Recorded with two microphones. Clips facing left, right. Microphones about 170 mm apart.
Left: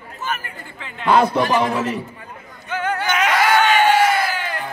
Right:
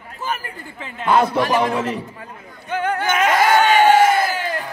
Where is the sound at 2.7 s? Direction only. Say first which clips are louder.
Right 1 dB; 50° right (ahead or behind).